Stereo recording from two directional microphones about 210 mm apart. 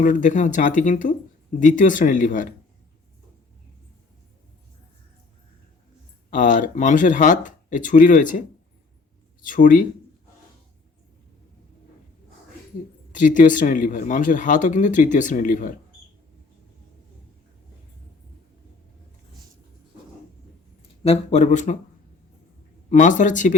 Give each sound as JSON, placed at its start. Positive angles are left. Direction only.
{"t": 0.0, "sound": "speech", "side_deg": 35}
{"t": 6.3, "sound": "speech", "side_deg": 40}
{"t": 13.1, "sound": "speech", "side_deg": 40}
{"t": 21.1, "sound": "speech", "side_deg": 30}
{"t": 22.9, "sound": "speech", "side_deg": 35}